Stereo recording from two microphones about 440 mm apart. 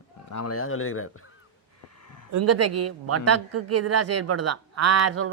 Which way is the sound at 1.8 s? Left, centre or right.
Left.